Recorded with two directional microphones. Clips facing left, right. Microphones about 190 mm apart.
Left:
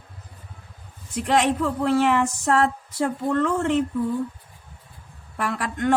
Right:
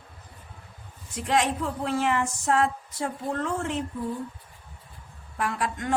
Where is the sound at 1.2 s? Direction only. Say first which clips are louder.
Left 4 dB; 70° left (ahead or behind).